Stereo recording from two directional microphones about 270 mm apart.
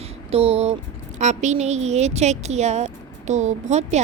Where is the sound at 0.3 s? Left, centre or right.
Right.